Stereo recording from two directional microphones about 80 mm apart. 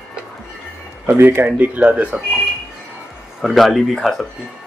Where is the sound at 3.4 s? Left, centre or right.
Centre.